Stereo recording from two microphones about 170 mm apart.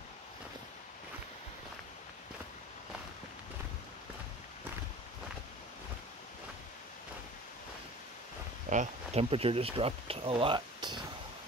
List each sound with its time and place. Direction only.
8.6 s speech: 40° right (ahead or behind); by 11.0 s 25° right (ahead or behind)